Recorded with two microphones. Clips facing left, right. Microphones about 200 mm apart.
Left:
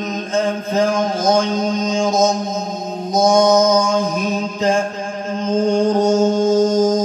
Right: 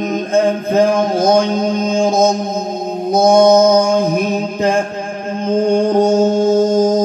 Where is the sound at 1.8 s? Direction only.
55° right (ahead or behind).